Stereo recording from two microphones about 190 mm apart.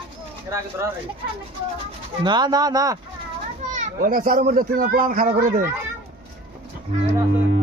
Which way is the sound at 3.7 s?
45° right (ahead or behind).